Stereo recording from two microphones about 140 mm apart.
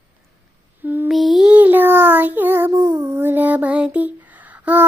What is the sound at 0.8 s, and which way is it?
Lullaby, 15° right (ahead or behind).